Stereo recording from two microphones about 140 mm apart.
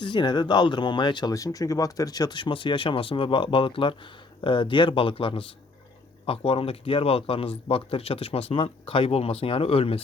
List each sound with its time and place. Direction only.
0.0 s speech: 35° left (ahead or behind)